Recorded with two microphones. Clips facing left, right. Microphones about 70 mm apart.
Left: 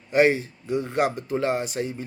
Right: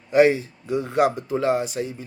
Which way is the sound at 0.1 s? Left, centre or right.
Left.